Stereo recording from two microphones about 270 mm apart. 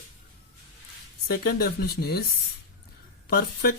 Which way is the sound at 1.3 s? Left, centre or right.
Left.